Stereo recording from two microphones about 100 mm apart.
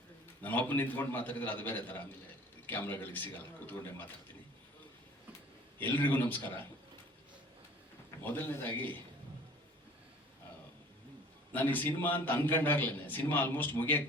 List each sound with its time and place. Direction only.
0.4 s a man's voice: 20° left (ahead or behind)
5.8 s a man's voice: 20° left (ahead or behind)
8.2 s a man's voice: 20° left (ahead or behind)
11.5 s a man's voice: 20° left (ahead or behind)